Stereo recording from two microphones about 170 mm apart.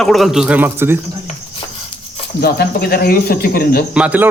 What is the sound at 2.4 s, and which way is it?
Speech, 65° left (ahead or behind).